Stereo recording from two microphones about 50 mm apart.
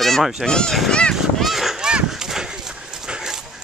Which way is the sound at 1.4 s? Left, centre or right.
Centre.